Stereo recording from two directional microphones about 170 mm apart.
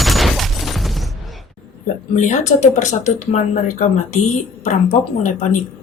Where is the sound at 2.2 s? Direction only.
45° left (ahead or behind).